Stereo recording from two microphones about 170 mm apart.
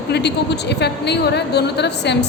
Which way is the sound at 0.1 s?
80° left.